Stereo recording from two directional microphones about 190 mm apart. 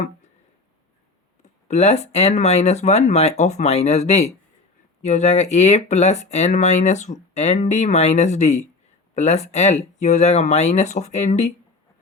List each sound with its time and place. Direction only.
1.4 s speech: 35° left (ahead or behind)